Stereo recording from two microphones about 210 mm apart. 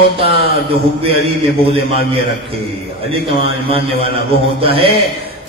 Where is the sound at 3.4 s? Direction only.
25° right (ahead or behind).